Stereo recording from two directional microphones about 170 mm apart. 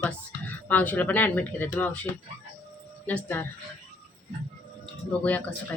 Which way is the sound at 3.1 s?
10° left (ahead or behind).